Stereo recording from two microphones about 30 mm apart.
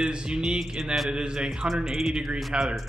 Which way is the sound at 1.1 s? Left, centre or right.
Right.